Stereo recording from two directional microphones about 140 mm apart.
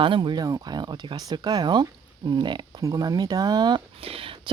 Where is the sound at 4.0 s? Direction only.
45° right (ahead or behind).